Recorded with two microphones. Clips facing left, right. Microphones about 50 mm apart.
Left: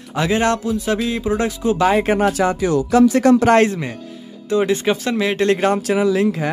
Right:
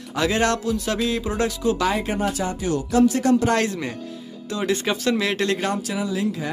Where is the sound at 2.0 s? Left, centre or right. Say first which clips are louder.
Left 8 dB; left.